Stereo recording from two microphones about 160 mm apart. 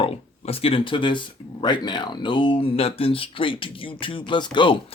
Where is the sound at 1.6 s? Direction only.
25° left (ahead or behind).